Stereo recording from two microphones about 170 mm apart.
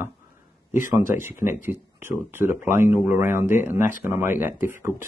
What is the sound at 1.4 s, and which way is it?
Speech, 15° right (ahead or behind).